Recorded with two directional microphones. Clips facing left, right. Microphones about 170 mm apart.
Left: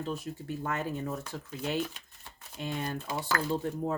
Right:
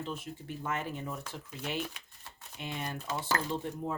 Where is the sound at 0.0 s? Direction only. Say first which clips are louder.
Left 4 dB; 40° left (ahead or behind).